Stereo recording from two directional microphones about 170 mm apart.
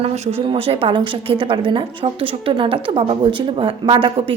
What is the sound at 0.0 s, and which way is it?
A woman's voice, 35° right (ahead or behind).